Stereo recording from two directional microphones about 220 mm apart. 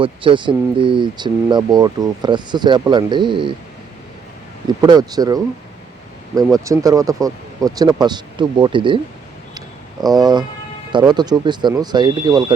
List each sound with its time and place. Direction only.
0.0 s speech: 25° right (ahead or behind)
4.8 s speech: 15° right (ahead or behind)
6.7 s speech: 15° right (ahead or behind)
9.6 s a sound: 15° right (ahead or behind)
10.9 s speech: 20° right (ahead or behind)